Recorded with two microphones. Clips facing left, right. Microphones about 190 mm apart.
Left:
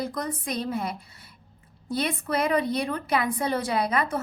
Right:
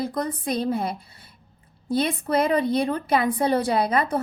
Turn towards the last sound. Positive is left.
turn(degrees=-30)  # may be behind; listen again after turning